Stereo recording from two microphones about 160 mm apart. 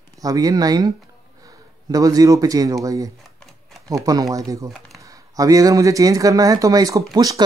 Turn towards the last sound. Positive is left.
turn(degrees=-20)  # may be behind; listen again after turning